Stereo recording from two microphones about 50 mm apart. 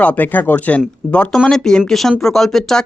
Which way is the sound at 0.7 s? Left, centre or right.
Left.